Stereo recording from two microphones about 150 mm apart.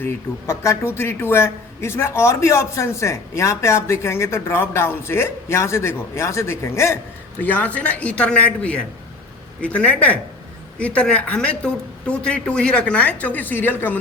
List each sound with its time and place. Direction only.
0.0 s a man's voice: 20° left (ahead or behind)